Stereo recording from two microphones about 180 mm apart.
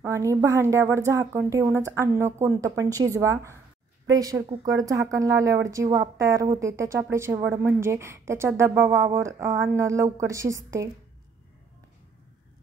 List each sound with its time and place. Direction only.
0.0 s a woman's voice: 15° right (ahead or behind)